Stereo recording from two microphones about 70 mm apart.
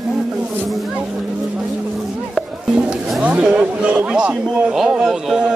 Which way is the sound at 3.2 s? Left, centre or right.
Centre.